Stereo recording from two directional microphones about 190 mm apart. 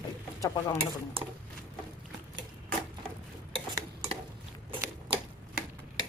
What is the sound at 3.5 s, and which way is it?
Stir, 30° right (ahead or behind).